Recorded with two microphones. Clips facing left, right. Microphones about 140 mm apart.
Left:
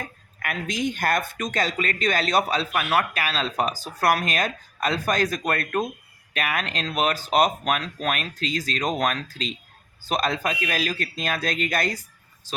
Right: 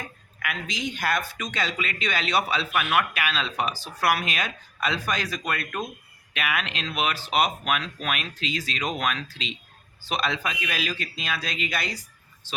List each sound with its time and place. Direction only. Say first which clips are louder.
0.0 s speech: left 1 dB; 45° left (ahead or behind)